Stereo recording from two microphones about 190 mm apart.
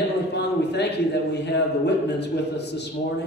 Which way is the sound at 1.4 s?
65° left (ahead or behind).